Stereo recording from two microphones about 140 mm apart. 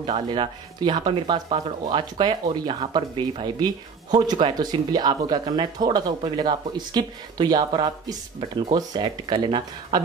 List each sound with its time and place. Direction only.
0.0 s speech: 35° right (ahead or behind)